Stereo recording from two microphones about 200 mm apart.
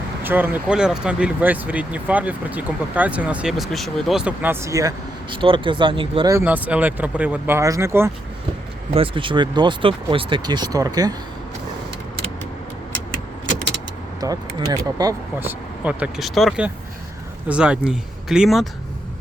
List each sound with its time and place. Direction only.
0.2 s speech: 10° right (ahead or behind); by 6.3 s 25° right (ahead or behind)
6.3 s speech: 10° right (ahead or behind)
8.9 s speech: 25° right (ahead or behind)
14.2 s speech: 20° right (ahead or behind); by 18.7 s centre (ahead or behind)